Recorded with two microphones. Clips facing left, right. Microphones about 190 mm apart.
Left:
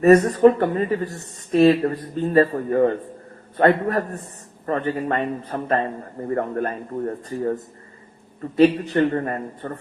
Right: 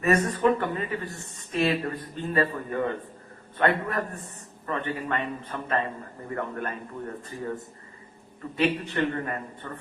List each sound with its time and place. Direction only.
0.0 s a man's voice: 40° left (ahead or behind)